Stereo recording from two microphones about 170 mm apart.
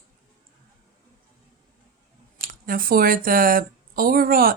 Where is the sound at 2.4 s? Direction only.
55° right (ahead or behind).